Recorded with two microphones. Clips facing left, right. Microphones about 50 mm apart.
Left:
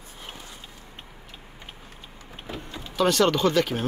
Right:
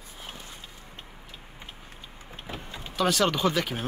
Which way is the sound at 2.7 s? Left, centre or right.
Centre.